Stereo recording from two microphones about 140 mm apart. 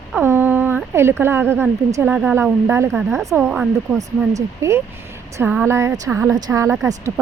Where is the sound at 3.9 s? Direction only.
25° right (ahead or behind).